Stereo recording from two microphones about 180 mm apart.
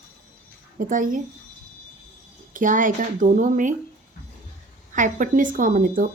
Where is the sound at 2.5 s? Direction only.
45° right (ahead or behind).